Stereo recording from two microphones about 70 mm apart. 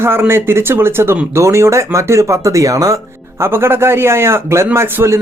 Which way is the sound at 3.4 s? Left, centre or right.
Right.